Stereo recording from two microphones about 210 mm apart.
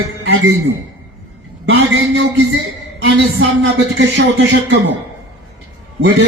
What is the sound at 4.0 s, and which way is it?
Speech, 55° right (ahead or behind).